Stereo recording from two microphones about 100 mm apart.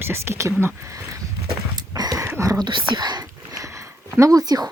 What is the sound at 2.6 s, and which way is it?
Speech, 50° right (ahead or behind).